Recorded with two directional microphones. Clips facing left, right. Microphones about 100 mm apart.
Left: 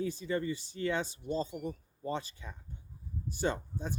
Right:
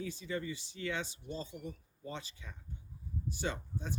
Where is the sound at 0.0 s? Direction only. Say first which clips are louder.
Left 6 dB; 45° left (ahead or behind).